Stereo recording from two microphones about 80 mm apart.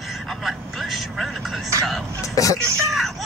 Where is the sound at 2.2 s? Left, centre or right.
Left.